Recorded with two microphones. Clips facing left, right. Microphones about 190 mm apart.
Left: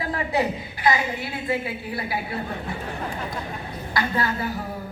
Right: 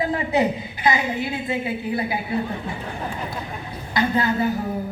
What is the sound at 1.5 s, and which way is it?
Speech, 20° right (ahead or behind).